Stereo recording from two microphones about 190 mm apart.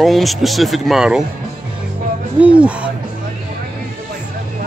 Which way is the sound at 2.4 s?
5° right (ahead or behind).